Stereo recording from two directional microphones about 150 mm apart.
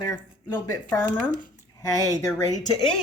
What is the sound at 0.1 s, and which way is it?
Speech, 15° left (ahead or behind).